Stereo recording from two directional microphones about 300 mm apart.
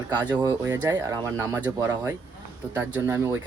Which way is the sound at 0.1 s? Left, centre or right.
Centre.